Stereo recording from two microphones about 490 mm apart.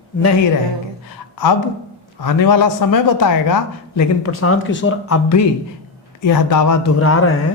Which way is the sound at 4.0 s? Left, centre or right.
Left.